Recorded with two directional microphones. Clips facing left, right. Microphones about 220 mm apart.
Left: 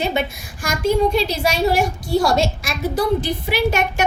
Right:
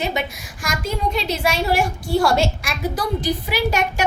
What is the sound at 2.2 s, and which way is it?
A woman's voice, 20° left (ahead or behind).